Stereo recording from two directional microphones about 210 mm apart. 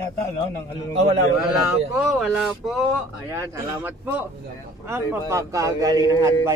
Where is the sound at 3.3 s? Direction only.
10° right (ahead or behind).